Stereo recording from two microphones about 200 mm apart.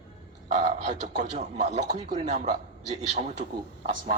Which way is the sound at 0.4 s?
40° right (ahead or behind).